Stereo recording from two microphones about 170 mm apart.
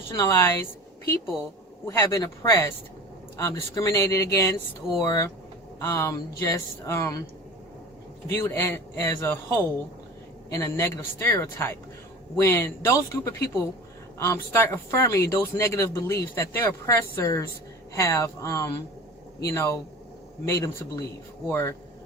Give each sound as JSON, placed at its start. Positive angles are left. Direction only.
{"t": 0.1, "sound": "a woman's voice", "side_deg": 15}
{"t": 8.3, "sound": "speech", "side_deg": 15}
{"t": 10.5, "sound": "speech", "side_deg": 20}